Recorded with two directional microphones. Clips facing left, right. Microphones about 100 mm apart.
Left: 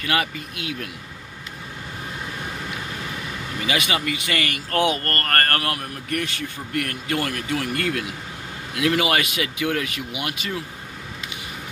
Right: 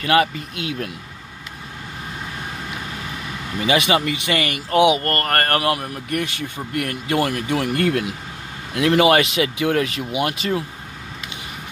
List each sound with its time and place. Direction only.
0.0 s speech: 35° right (ahead or behind)
3.6 s speech: 25° right (ahead or behind)